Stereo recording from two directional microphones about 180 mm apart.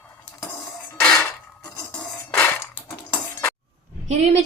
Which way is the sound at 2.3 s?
10° left (ahead or behind).